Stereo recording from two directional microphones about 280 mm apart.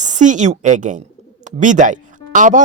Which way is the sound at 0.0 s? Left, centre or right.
Right.